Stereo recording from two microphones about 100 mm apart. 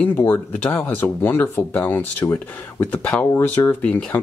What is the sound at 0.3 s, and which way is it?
Speech, 15° left (ahead or behind).